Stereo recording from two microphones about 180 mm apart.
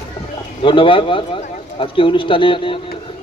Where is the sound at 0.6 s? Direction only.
30° left (ahead or behind).